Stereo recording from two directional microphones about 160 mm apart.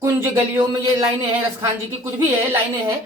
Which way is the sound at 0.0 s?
15° right (ahead or behind).